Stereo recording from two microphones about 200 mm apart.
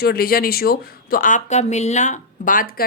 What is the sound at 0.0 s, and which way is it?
A woman's voice, 50° left (ahead or behind).